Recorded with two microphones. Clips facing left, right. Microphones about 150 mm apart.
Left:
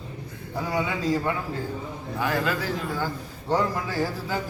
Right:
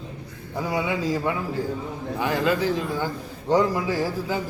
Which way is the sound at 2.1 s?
20° right (ahead or behind).